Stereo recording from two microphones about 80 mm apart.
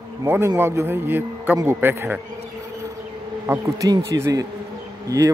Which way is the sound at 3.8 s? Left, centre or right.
Right.